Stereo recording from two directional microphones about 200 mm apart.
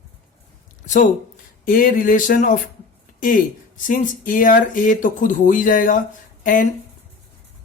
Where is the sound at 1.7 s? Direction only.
45° left (ahead or behind).